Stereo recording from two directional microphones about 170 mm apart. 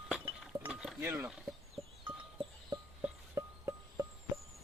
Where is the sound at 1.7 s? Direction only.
30° right (ahead or behind).